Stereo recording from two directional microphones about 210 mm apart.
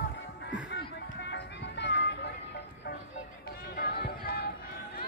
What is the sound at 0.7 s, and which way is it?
Music, 50° left (ahead or behind).